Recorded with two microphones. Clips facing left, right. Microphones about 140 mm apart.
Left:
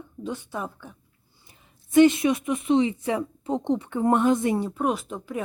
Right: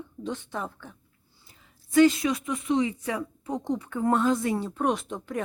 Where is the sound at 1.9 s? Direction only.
20° left (ahead or behind).